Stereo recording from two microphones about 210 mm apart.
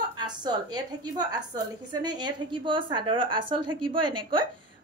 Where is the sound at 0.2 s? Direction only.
20° right (ahead or behind).